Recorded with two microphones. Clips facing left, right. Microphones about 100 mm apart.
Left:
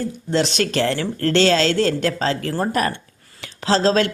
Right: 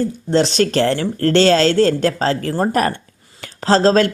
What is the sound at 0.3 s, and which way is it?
Speech, 35° right (ahead or behind).